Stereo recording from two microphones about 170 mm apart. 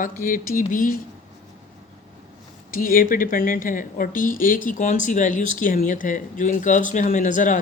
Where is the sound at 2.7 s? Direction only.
55° left (ahead or behind).